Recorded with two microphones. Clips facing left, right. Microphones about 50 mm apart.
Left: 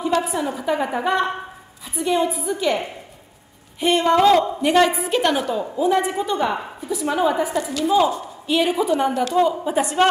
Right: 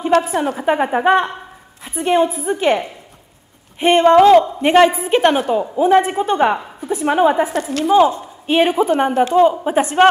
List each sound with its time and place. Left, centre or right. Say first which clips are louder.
0.1 s a woman's voice: right 7 dB; right
0.6 s a woman's voice: right 6 dB; right
3.8 s a woman's voice: right 6 dB; right
7.9 s a woman's voice: right 6 dB; right